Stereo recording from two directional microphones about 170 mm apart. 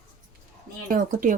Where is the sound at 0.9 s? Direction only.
55° right (ahead or behind).